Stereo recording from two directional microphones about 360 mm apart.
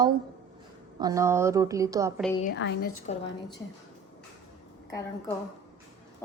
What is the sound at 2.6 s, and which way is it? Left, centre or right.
Speech, left.